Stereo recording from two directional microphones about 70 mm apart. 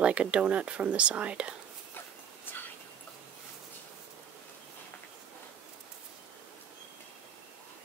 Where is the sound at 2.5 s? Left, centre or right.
Left.